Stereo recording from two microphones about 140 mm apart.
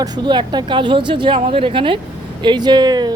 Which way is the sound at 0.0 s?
30° right (ahead or behind).